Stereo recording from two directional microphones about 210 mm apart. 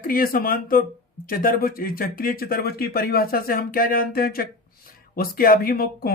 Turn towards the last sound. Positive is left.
turn(degrees=45)  # may be behind; listen again after turning